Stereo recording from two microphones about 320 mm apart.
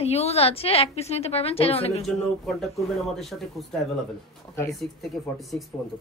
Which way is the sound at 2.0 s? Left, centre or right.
Centre.